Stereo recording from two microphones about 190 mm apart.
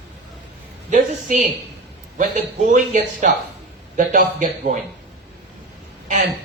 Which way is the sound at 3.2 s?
40° right (ahead or behind).